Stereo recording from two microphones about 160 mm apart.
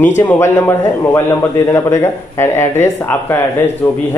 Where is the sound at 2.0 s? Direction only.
15° left (ahead or behind).